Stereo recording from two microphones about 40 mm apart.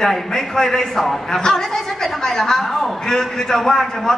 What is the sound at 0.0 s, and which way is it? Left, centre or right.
A man's voice, centre.